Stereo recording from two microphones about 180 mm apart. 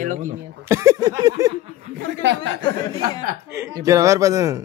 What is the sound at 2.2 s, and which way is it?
Speech, 80° right.